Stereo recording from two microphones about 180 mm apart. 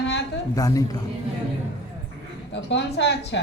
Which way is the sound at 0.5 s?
20° left (ahead or behind).